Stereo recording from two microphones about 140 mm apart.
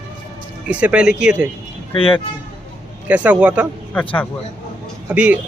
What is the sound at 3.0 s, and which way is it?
Speech, 10° right (ahead or behind).